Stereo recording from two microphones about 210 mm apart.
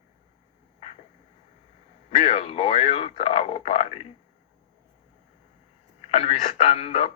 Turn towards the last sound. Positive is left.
turn(degrees=30)  # may be behind; listen again after turning